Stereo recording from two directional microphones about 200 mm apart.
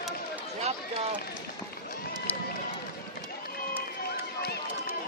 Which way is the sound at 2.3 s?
10° left (ahead or behind).